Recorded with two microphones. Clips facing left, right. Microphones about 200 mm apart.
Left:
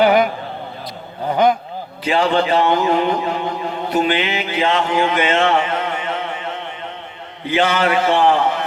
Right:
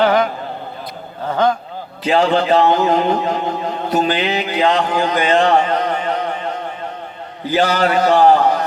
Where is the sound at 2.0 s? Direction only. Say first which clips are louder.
Right 2 dB; 40° right (ahead or behind).